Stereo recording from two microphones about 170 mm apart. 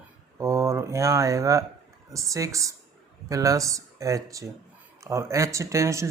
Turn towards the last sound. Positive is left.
turn(degrees=-15)  # may be behind; listen again after turning